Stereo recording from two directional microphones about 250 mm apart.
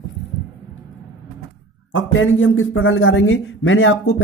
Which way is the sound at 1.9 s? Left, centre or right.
Left.